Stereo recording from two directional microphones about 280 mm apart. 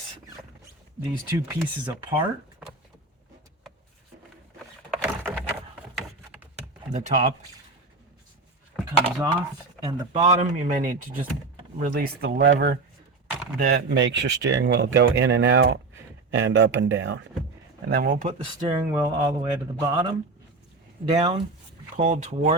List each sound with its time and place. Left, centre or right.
1.5 s speech: centre
5.0 s a sound: centre
6.9 s speech: right
8.9 s speech: centre
18.6 s speech: centre